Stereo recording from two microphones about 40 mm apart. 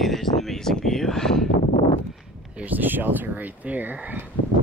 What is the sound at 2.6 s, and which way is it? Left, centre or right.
Speech, right.